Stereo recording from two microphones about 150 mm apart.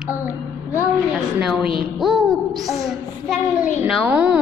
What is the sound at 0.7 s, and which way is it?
A woman's voice, 5° right (ahead or behind).